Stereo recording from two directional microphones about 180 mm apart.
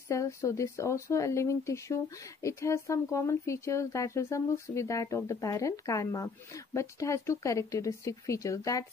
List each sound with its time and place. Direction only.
0.1 s speech: 15° left (ahead or behind)